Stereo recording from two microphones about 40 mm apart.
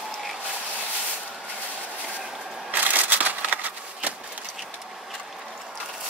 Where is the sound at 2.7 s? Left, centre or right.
Right.